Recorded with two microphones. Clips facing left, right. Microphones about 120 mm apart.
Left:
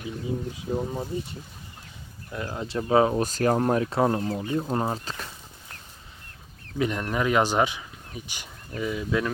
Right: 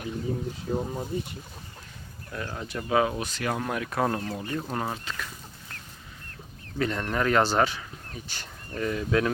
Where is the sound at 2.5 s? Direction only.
30° left (ahead or behind).